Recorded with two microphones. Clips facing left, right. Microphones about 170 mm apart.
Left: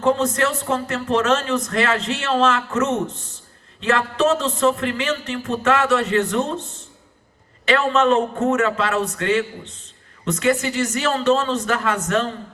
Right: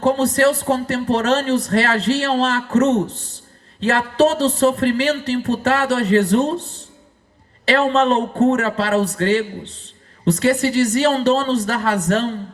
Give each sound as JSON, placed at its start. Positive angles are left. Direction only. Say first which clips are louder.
{"t": 0.0, "sound": "speech", "louder": "right 4 dB", "side_deg": -35}